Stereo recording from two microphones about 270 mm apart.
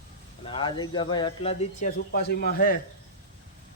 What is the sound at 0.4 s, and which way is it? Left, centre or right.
Speech, centre.